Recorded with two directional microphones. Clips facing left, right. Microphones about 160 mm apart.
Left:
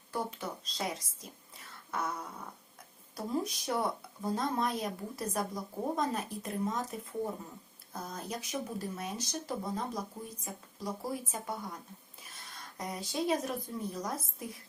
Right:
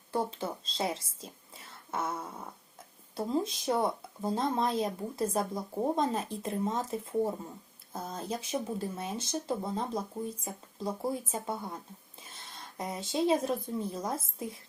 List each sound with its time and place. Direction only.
0.1 s a woman's voice: 25° right (ahead or behind)